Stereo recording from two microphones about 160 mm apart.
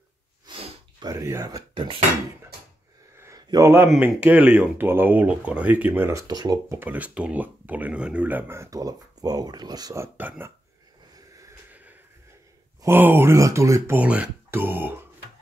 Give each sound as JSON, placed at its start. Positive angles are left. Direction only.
{"t": 0.5, "sound": "snort", "side_deg": -30}
{"t": 1.1, "sound": "speech", "side_deg": -20}
{"t": 3.2, "sound": "a sound", "side_deg": -20}
{"t": 3.9, "sound": "speech", "side_deg": -10}
{"t": 6.8, "sound": "speech", "side_deg": -10}
{"t": 12.8, "sound": "speech", "side_deg": -15}